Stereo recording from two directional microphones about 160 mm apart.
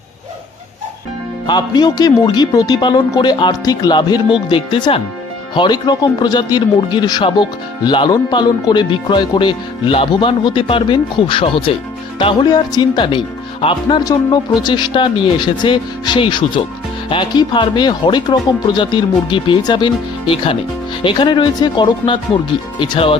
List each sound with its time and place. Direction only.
1.5 s speech: 25° left (ahead or behind)